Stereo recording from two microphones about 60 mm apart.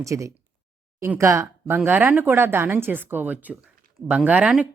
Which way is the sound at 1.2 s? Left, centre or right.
Right.